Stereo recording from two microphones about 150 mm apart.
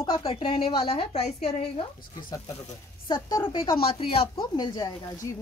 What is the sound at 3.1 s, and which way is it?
A woman's voice, 30° left (ahead or behind).